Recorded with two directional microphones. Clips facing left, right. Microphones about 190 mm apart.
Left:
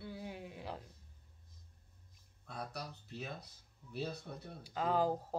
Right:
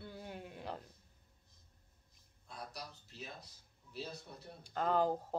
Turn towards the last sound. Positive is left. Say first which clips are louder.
# even
turn(degrees=5)  # may be behind; listen again after turning